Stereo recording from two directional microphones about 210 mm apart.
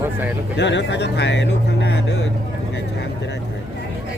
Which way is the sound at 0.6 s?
55° left (ahead or behind).